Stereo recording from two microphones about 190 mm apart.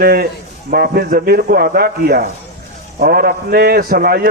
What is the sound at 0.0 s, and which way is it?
A man's voice, 55° right (ahead or behind).